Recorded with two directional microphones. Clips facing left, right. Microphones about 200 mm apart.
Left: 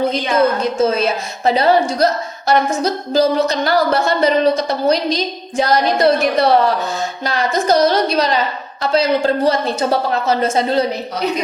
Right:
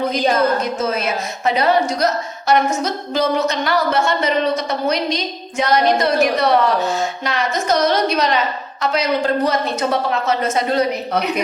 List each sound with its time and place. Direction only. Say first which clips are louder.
0.6 s a woman's voice: left 5 dB; 30° left (ahead or behind)